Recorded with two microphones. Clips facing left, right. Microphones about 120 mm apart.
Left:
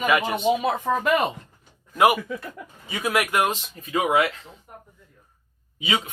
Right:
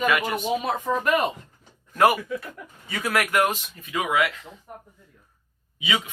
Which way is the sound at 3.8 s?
35° left (ahead or behind).